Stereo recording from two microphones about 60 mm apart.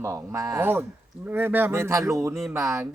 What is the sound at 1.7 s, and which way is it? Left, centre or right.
Speech, right.